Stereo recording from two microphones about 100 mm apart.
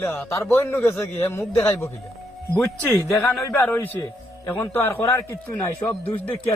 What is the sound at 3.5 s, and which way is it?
A man's voice, 20° left (ahead or behind).